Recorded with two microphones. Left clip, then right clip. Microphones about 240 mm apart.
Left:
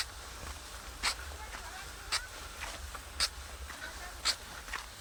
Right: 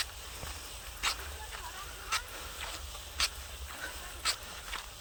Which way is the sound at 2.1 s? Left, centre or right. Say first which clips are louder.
Right 1 dB; centre.